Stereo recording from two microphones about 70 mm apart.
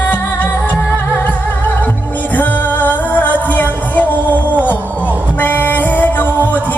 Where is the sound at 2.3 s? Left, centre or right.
Left.